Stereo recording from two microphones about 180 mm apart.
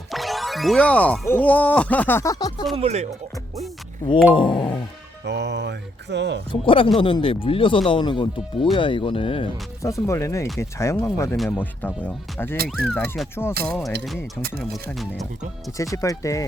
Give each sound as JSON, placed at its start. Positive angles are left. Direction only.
{"t": 0.1, "sound": "speech", "side_deg": 0}
{"t": 2.7, "sound": "speech", "side_deg": -35}
{"t": 4.4, "sound": "speech", "side_deg": 25}
{"t": 5.2, "sound": "speech", "side_deg": -70}
{"t": 6.5, "sound": "speech", "side_deg": 30}
{"t": 9.8, "sound": "speech", "side_deg": 15}
{"t": 11.3, "sound": "speech", "side_deg": 5}
{"t": 12.6, "sound": "speech", "side_deg": 0}
{"t": 14.9, "sound": "speech", "side_deg": 0}
{"t": 15.8, "sound": "speech", "side_deg": 20}